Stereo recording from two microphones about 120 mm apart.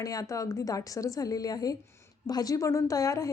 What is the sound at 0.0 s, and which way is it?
A woman's voice, 30° left (ahead or behind).